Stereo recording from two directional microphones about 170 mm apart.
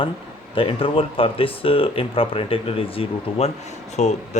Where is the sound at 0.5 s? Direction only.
30° left (ahead or behind).